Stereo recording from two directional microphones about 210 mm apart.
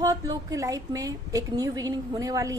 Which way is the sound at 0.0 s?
15° right (ahead or behind).